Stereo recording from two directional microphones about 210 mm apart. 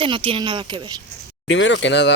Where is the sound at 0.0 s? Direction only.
25° right (ahead or behind).